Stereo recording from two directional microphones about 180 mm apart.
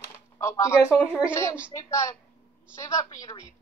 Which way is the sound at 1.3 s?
15° left (ahead or behind).